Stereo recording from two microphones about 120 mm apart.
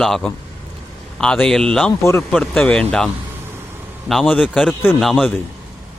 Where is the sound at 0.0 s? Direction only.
5° left (ahead or behind).